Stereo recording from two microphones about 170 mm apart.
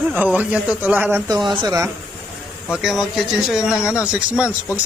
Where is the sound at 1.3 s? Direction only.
25° right (ahead or behind).